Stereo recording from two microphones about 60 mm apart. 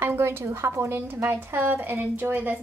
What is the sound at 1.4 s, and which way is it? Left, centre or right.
Speech, right.